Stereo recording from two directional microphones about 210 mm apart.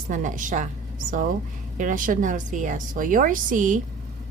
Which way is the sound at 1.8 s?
40° right (ahead or behind).